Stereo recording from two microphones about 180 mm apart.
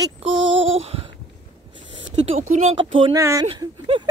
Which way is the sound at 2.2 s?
45° right (ahead or behind).